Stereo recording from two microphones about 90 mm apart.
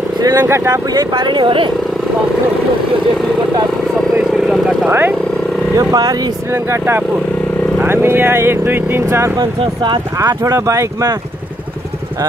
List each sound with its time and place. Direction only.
0.2 s speech: 45° right (ahead or behind); by 1.7 s 70° right (ahead or behind)
4.2 s vehicle: 10° right (ahead or behind)
5.8 s speech: 45° right (ahead or behind)
6.5 s speech: 30° right (ahead or behind)